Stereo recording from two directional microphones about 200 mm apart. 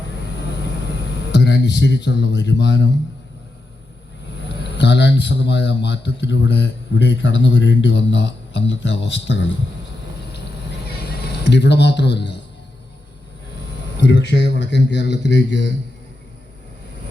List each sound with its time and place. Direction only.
0.9 s speech: 60° left (ahead or behind)
4.4 s a man's voice: 60° left (ahead or behind)
10.3 s a sound: 55° left (ahead or behind)
14.0 s a man's voice: 65° left (ahead or behind)